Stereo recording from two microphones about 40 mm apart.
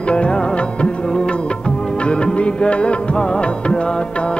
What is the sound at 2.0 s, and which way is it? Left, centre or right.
Music, left.